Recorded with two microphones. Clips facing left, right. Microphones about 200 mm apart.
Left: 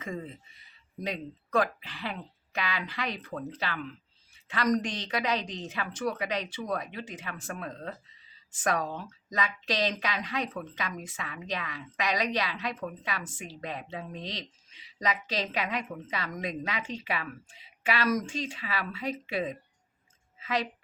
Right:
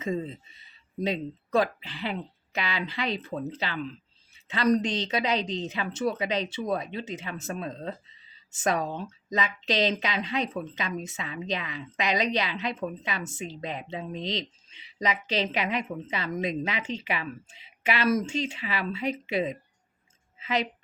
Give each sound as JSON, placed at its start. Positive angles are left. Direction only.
{"t": 0.0, "sound": "a woman's voice", "side_deg": -25}